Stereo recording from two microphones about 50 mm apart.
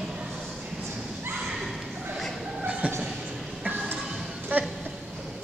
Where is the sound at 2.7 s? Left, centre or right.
Right.